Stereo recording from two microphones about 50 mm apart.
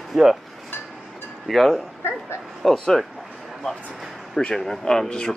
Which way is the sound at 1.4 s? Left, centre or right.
Centre.